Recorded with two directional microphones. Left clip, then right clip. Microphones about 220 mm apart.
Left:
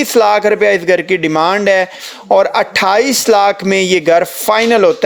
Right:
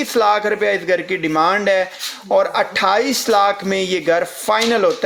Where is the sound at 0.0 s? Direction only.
35° left (ahead or behind).